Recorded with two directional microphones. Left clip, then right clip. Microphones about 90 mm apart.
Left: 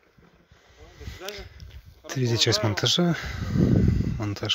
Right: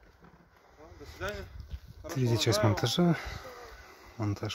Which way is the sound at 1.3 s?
25° left (ahead or behind).